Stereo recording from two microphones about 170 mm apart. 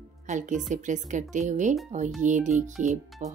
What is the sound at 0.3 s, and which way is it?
A woman's voice, 45° right (ahead or behind).